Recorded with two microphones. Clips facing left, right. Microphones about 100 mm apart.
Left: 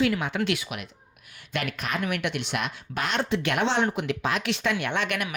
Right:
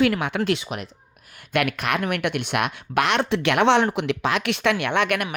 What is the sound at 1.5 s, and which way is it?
A woman's voice, 65° right (ahead or behind).